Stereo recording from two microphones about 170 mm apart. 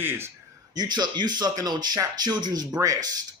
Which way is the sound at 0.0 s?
15° right (ahead or behind).